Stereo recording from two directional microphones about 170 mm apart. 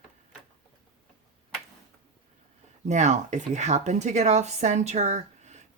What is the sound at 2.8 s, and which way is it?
A woman's voice, 45° right (ahead or behind).